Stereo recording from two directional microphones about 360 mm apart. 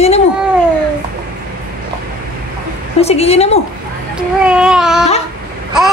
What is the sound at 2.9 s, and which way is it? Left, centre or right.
Speech, centre.